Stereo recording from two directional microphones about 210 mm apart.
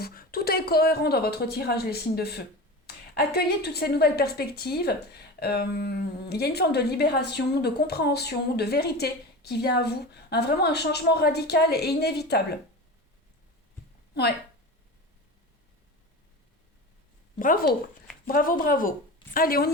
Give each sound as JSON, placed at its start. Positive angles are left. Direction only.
{"t": 0.0, "sound": "a woman's voice", "side_deg": 45}
{"t": 17.4, "sound": "a woman's voice", "side_deg": 45}